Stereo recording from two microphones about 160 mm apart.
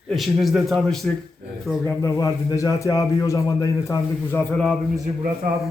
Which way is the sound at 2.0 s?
20° left (ahead or behind).